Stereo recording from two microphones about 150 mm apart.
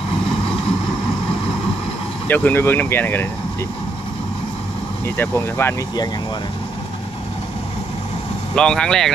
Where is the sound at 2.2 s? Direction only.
10° left (ahead or behind).